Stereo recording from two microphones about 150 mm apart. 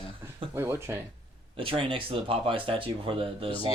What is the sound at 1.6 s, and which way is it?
Speech, 35° right (ahead or behind).